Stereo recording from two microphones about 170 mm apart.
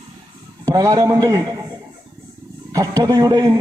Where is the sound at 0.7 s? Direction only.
20° right (ahead or behind).